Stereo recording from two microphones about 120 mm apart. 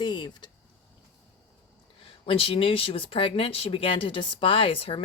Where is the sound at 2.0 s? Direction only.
50° left (ahead or behind).